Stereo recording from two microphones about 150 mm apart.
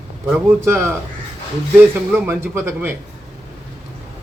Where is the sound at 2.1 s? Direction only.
15° right (ahead or behind).